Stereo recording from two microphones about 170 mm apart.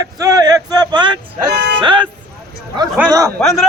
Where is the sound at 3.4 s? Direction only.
Centre (ahead or behind).